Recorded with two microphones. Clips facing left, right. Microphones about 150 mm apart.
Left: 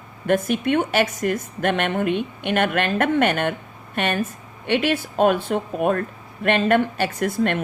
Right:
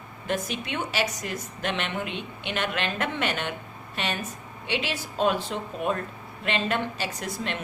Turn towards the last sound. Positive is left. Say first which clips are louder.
# left 10 dB
turn(degrees=55)  # may be behind; listen again after turning